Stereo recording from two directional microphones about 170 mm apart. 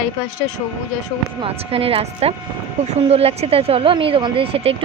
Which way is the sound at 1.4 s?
35° right (ahead or behind).